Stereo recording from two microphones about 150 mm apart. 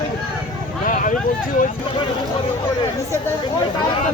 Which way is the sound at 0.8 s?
65° left (ahead or behind).